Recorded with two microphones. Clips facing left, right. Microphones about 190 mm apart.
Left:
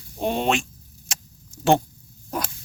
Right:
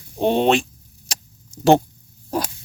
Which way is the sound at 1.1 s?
35° right (ahead or behind).